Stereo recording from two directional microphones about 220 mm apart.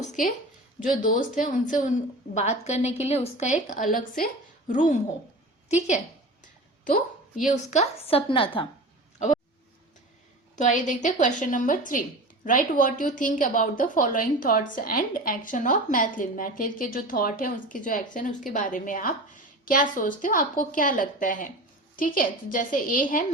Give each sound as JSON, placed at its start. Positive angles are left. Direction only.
{"t": 0.0, "sound": "a woman's voice", "side_deg": 35}
{"t": 7.4, "sound": "a woman's voice", "side_deg": 30}
{"t": 10.5, "sound": "a woman's voice", "side_deg": 35}